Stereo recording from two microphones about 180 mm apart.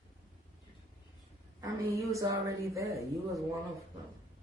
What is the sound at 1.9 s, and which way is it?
Speech, 15° right (ahead or behind).